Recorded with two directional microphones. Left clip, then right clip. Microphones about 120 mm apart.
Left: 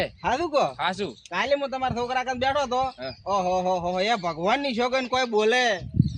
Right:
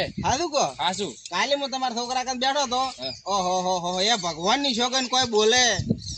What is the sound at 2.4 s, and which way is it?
Speech, 10° left (ahead or behind).